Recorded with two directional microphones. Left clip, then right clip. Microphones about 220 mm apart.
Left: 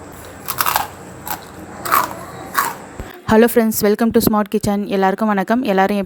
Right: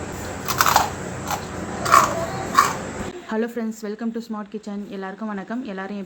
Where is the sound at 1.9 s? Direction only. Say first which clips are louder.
Right 1 dB; 50° left (ahead or behind).